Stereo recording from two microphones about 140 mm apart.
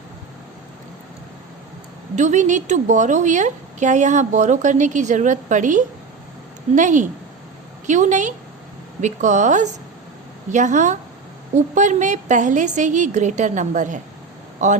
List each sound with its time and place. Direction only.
2.1 s a woman's voice: 60° right (ahead or behind)